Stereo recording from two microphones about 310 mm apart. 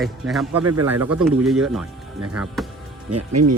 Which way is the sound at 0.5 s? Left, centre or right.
Right.